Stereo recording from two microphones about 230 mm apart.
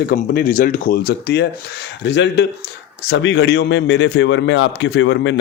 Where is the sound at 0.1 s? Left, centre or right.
Left.